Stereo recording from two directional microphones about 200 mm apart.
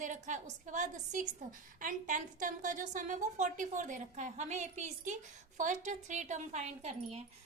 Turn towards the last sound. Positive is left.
turn(degrees=-35)  # may be behind; listen again after turning